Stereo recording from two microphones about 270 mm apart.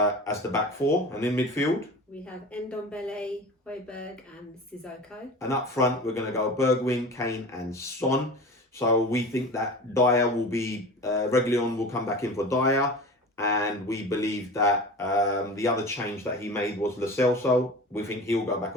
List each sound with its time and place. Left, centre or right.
0.0 s speech: centre
5.4 s speech: centre